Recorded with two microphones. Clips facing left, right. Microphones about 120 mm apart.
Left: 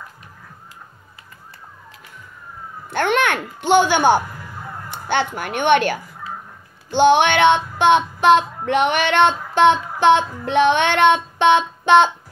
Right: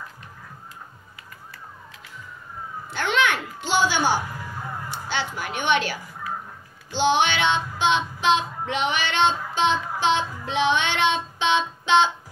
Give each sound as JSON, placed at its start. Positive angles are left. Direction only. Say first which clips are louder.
{"t": 2.9, "sound": "a child's voice", "louder": "left 5 dB", "side_deg": 55}
{"t": 6.9, "sound": "child singing", "louder": "left 7 dB", "side_deg": 55}